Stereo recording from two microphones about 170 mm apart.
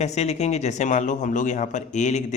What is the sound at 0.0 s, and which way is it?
Speech, 40° left (ahead or behind).